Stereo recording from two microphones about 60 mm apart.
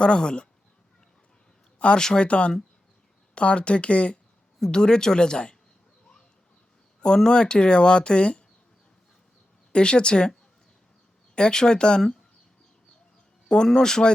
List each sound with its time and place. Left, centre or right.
0.0 s speech: centre
1.8 s speech: centre
7.0 s speech: centre
9.7 s speech: centre
11.3 s speech: centre
13.5 s speech: centre